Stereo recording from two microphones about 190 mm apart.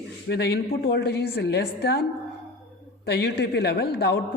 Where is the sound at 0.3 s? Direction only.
60° left (ahead or behind).